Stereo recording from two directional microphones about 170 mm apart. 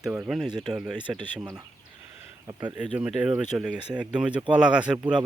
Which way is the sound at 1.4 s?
20° right (ahead or behind).